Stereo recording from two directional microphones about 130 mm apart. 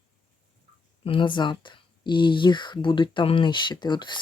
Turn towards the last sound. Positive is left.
turn(degrees=35)  # may be behind; listen again after turning